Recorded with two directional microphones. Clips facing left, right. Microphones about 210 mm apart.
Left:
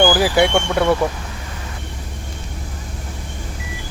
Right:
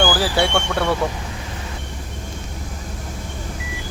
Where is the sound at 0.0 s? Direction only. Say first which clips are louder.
Left 4 dB; 15° left (ahead or behind).